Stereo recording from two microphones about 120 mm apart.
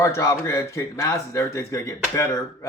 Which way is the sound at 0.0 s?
20° left (ahead or behind).